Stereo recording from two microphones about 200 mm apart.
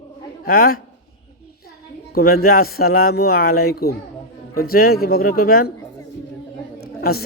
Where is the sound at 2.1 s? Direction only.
50° left (ahead or behind).